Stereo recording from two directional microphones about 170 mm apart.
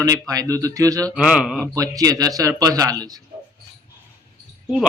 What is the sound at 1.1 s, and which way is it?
Speech, 5° right (ahead or behind).